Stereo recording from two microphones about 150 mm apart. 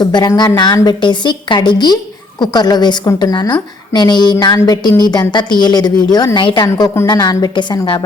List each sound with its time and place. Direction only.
0.0 s a woman's voice: 30° left (ahead or behind)